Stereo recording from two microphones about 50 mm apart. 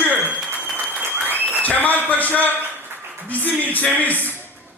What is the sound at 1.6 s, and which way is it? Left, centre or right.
A man's voice, left.